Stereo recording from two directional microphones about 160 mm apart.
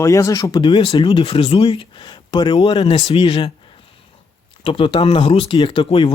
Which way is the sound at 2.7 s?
40° left (ahead or behind).